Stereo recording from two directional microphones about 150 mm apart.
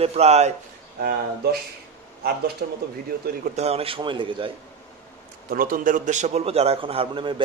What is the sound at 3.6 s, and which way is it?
Speech, 40° right (ahead or behind).